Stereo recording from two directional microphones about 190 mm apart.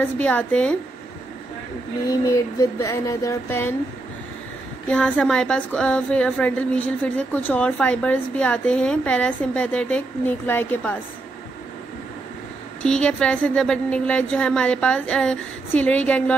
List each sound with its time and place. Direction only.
0.0 s a woman's voice: 5° left (ahead or behind)
2.0 s a woman's voice: 20° left (ahead or behind)
4.8 s a woman's voice: 5° left (ahead or behind)
12.8 s a woman's voice: 5° left (ahead or behind)